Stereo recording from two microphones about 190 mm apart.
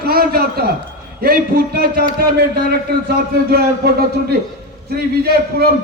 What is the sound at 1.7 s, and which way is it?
A man's voice, 55° right (ahead or behind).